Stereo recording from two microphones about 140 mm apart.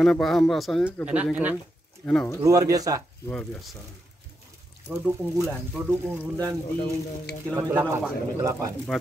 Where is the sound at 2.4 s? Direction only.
25° right (ahead or behind).